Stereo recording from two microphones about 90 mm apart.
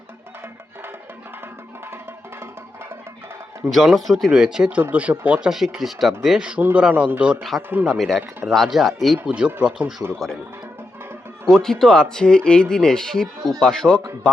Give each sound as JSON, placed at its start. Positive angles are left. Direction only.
{"t": 3.7, "sound": "speech", "side_deg": 0}
{"t": 5.5, "sound": "speech", "side_deg": -5}
{"t": 7.9, "sound": "speech", "side_deg": 0}
{"t": 11.5, "sound": "a man's voice", "side_deg": 5}